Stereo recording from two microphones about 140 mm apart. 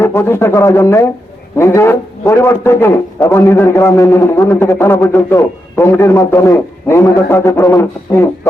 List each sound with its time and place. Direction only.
0.0 s a man's voice: 15° left (ahead or behind)